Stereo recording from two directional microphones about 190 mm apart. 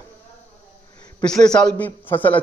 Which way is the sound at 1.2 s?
5° left (ahead or behind).